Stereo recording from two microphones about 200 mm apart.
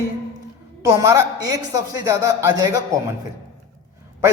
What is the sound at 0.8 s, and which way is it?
A man's voice, 15° right (ahead or behind).